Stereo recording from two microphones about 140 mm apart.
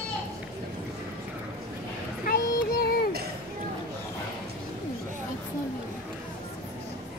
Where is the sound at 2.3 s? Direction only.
90° left.